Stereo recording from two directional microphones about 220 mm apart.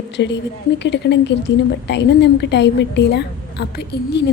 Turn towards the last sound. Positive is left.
turn(degrees=50)  # may be behind; listen again after turning